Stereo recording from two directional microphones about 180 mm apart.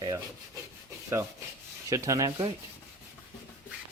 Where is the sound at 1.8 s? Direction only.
20° right (ahead or behind).